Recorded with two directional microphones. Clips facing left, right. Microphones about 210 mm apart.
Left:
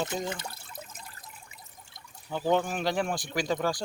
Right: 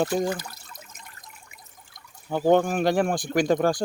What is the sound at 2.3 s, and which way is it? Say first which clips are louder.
Speech: right 7 dB; 50° right (ahead or behind).